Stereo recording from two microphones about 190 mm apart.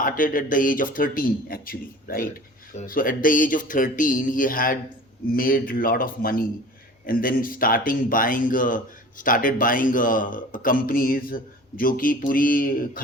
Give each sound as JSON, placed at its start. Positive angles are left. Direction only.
{"t": 0.0, "sound": "speech", "side_deg": 45}